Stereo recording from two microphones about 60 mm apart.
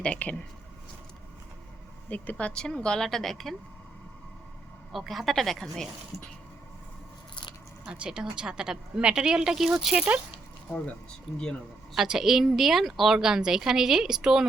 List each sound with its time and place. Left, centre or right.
0.0 s speech: left
2.0 s speech: left
2.5 s a woman's voice: centre
4.9 s a woman's voice: centre
7.9 s speech: centre
11.3 s a woman's voice: centre
11.9 s speech: centre